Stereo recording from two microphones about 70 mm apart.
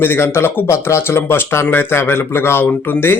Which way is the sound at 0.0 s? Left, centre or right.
Left.